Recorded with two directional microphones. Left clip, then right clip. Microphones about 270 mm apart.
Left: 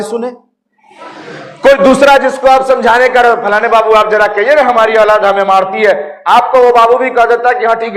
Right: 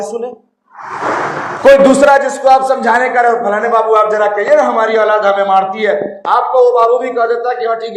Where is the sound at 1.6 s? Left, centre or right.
Left.